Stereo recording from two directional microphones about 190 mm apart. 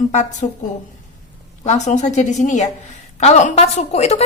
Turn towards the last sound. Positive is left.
turn(degrees=35)  # may be behind; listen again after turning